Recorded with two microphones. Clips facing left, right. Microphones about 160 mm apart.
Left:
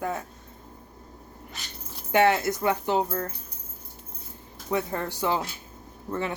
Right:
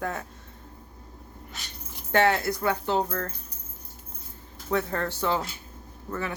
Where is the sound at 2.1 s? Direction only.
15° left (ahead or behind).